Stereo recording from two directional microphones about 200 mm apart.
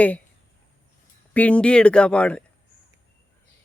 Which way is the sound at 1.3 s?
5° left (ahead or behind).